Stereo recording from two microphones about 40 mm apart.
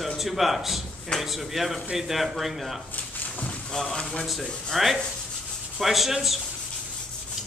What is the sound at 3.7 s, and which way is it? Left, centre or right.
Speech, centre.